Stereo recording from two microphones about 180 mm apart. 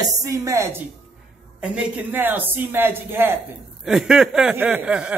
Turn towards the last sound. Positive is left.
turn(degrees=-5)  # may be behind; listen again after turning